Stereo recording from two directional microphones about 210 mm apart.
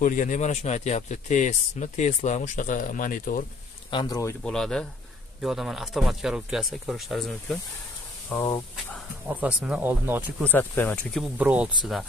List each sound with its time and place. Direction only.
0.0 s speech: 40° left (ahead or behind)
3.9 s speech: 20° left (ahead or behind)
9.3 s speech: 5° right (ahead or behind)
10.5 s speech: 10° left (ahead or behind)
11.3 s speech: 5° right (ahead or behind)